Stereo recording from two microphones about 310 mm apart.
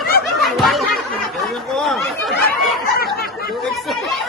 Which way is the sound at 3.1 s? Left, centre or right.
Left.